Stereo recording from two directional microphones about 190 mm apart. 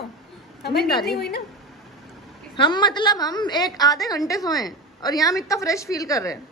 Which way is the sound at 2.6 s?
25° left (ahead or behind).